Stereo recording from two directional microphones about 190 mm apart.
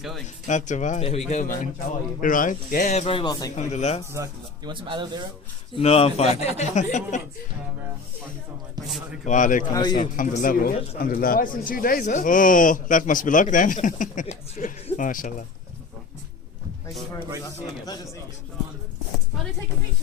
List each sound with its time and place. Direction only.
0.4 s speech: 40° left (ahead or behind)
3.0 s speech: 25° left (ahead or behind)
3.5 s speech: 40° left (ahead or behind)
4.1 s speech: 20° right (ahead or behind)
5.7 s speech: 30° left (ahead or behind)
9.2 s speech: 40° left (ahead or behind)
9.7 s speech: 20° left (ahead or behind)
10.0 s speech: 45° left (ahead or behind)
17.4 s speech: 20° left (ahead or behind)